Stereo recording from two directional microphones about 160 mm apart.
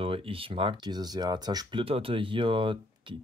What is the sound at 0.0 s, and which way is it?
Speech, 35° right (ahead or behind).